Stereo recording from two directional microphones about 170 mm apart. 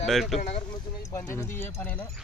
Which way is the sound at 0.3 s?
35° left (ahead or behind).